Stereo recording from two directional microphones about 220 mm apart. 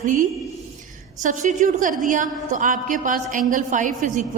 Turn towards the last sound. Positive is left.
turn(degrees=-35)  # may be behind; listen again after turning